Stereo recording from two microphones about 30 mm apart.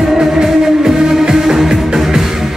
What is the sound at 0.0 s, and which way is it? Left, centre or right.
Music, centre.